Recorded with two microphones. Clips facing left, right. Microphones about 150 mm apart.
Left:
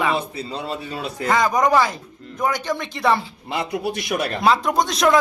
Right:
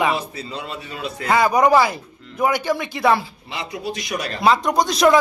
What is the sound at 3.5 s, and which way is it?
Speech, 55° left (ahead or behind).